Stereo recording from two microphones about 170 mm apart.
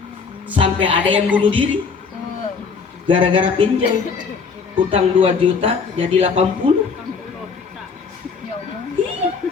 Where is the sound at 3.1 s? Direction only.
30° right (ahead or behind).